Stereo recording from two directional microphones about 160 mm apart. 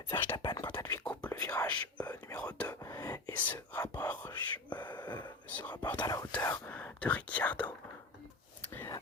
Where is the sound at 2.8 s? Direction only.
20° left (ahead or behind).